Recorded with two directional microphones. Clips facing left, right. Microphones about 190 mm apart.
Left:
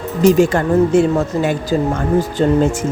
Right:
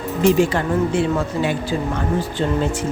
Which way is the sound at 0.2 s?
45° left (ahead or behind).